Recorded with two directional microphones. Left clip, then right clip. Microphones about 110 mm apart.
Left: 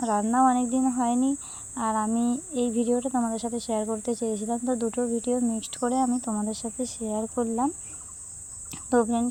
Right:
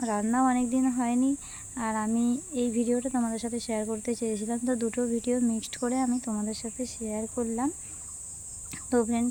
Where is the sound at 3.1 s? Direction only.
Centre (ahead or behind).